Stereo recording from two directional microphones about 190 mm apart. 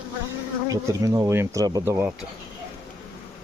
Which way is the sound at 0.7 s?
15° right (ahead or behind).